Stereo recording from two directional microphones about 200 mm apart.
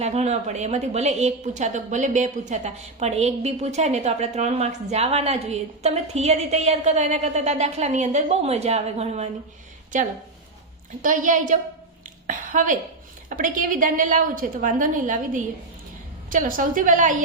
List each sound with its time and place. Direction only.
0.0 s a woman's voice: 35° right (ahead or behind)